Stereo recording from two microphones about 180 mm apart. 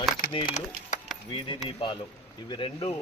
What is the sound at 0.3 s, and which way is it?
Speech, 30° left (ahead or behind).